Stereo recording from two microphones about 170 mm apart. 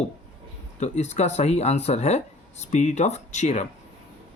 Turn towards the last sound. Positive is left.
turn(degrees=45)  # may be behind; listen again after turning